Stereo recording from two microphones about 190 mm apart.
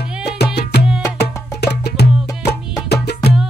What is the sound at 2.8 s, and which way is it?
Music, 60° left (ahead or behind).